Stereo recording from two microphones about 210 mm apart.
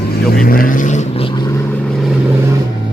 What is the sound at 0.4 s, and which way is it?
Vehicle, 45° left (ahead or behind).